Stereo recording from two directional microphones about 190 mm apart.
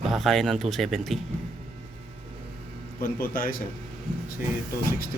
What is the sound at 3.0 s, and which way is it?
Speech, 50° left (ahead or behind).